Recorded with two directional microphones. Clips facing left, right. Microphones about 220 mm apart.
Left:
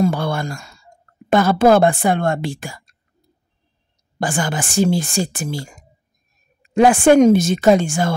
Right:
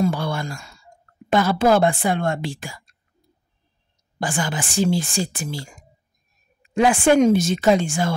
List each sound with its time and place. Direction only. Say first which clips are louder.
0.0 s sigh: left 3 dB; 50° left (ahead or behind)
1.3 s speech: left 4 dB; 50° left (ahead or behind)
4.2 s speech: left 3 dB; 45° left (ahead or behind)